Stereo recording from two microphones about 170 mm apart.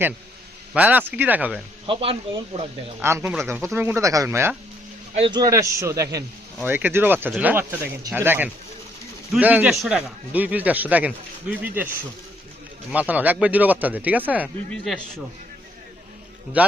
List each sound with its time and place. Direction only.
0.7 s a man's voice: 10° right (ahead or behind)
1.9 s speech: 30° right (ahead or behind)
3.0 s a man's voice: 15° right (ahead or behind)
5.1 s a man's voice: 30° right (ahead or behind); by 11.9 s 10° right (ahead or behind)
12.9 s a man's voice: 10° right (ahead or behind)
14.9 s a man's voice: centre (ahead or behind)
16.6 s a man's voice: 10° right (ahead or behind)